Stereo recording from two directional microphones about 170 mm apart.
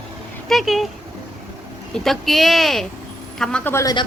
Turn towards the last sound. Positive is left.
turn(degrees=20)  # may be behind; listen again after turning